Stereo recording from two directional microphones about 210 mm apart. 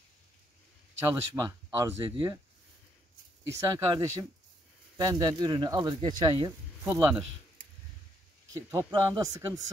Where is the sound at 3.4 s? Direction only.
15° right (ahead or behind).